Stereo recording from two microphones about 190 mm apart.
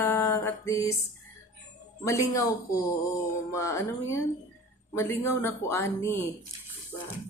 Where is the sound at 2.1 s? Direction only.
15° left (ahead or behind).